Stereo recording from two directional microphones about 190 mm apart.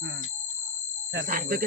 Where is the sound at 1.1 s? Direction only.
50° right (ahead or behind).